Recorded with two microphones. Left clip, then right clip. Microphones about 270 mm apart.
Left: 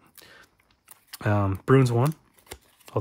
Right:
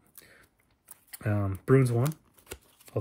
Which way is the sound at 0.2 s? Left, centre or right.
Centre.